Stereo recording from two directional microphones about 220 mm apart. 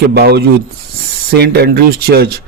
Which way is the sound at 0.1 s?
45° right (ahead or behind).